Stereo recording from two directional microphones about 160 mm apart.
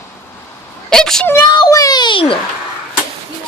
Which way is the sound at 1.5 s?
25° left (ahead or behind).